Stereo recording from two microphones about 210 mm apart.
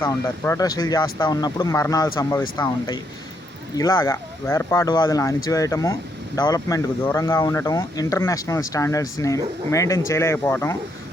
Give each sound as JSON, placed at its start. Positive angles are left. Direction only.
{"t": 0.0, "sound": "speech", "side_deg": 15}